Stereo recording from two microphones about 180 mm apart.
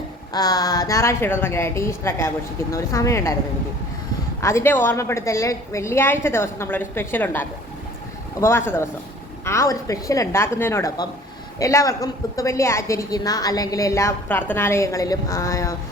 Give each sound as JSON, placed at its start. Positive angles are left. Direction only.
{"t": 0.3, "sound": "a woman's voice", "side_deg": 20}
{"t": 4.4, "sound": "a woman's voice", "side_deg": 15}